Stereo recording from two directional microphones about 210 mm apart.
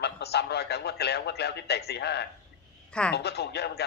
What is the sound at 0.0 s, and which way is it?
A man's voice, 50° left (ahead or behind).